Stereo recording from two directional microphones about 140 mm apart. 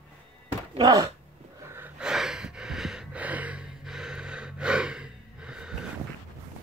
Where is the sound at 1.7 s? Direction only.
10° right (ahead or behind).